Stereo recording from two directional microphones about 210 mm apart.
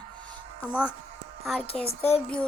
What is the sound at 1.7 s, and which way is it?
Speech, 5° left (ahead or behind).